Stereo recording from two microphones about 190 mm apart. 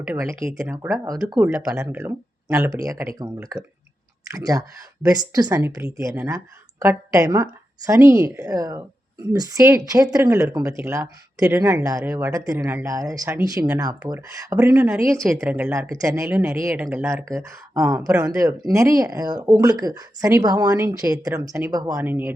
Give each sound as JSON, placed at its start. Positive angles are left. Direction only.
{"t": 0.0, "sound": "speech", "side_deg": -10}
{"t": 1.4, "sound": "speech", "side_deg": -5}